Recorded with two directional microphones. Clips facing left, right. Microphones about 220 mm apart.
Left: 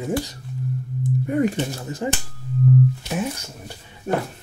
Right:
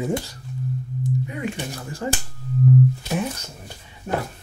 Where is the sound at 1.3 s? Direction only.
45° left (ahead or behind).